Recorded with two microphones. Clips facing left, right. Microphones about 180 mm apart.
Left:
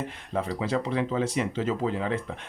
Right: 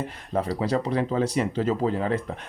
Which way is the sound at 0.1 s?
40° right (ahead or behind).